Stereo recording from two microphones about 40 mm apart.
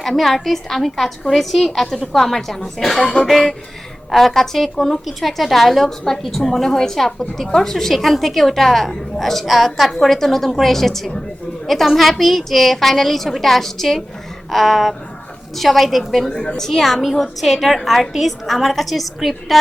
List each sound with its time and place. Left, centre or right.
0.0 s a woman's voice: centre
16.3 s a woman's voice: left
16.6 s a woman's voice: centre